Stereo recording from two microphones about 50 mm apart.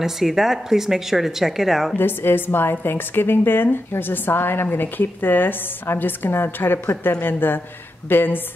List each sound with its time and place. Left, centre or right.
0.0 s speech: centre
2.0 s a woman's voice: left